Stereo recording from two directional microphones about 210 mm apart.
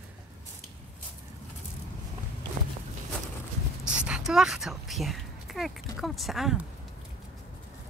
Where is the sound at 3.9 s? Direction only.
5° right (ahead or behind).